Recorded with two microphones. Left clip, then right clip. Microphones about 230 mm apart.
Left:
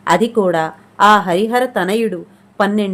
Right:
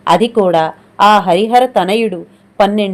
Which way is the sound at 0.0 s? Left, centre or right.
Centre.